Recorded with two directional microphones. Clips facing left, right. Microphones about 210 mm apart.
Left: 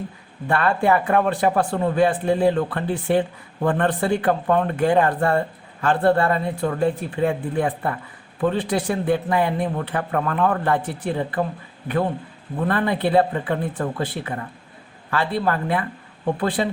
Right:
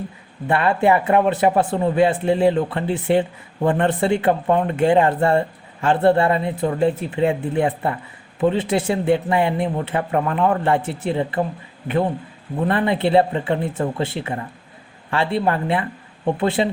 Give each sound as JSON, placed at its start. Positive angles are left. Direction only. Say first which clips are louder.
{"t": 0.4, "sound": "speech", "louder": "right 2 dB", "side_deg": -20}
{"t": 12.5, "sound": "speech", "louder": "right 2 dB", "side_deg": -20}